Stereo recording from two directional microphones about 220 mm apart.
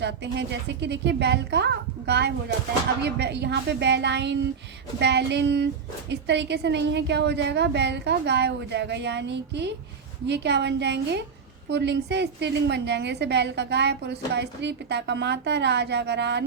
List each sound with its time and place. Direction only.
0.0 s a woman's voice: 50° right (ahead or behind)